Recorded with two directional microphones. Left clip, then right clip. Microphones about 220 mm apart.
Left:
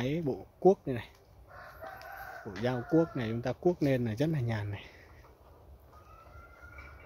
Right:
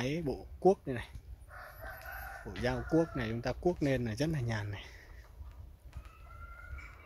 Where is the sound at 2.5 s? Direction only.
5° left (ahead or behind).